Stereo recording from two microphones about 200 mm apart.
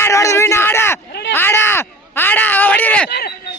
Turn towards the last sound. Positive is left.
turn(degrees=10)  # may be behind; listen again after turning